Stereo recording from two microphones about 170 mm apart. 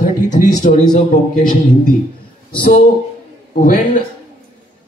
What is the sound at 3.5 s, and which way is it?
Speech, 55° left (ahead or behind).